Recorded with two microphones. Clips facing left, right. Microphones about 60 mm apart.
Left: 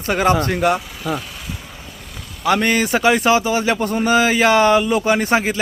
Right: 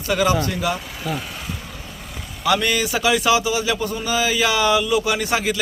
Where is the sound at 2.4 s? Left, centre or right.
Left.